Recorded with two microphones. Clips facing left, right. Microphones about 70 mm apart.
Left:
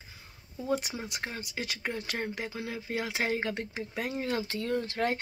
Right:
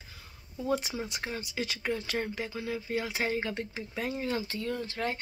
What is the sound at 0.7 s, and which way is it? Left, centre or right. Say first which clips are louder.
Speech: left 1 dB; left.